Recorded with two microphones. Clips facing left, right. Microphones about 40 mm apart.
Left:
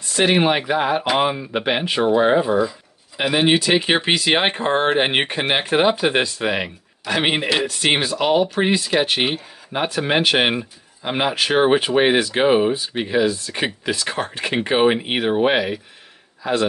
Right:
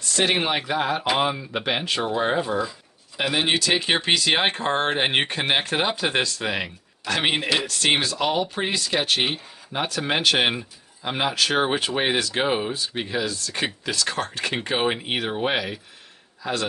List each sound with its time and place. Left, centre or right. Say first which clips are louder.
0.0 s speech: left 5 dB; centre